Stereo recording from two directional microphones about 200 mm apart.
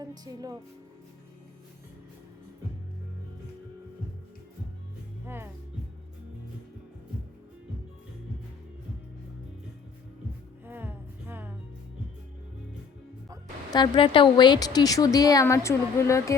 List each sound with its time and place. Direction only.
0.0 s speech: 20° right (ahead or behind)
5.2 s music: 10° right (ahead or behind)
10.7 s music: 10° right (ahead or behind)
13.7 s speech: 20° left (ahead or behind)